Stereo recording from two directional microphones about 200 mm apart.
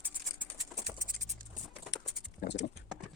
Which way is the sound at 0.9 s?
40° right (ahead or behind).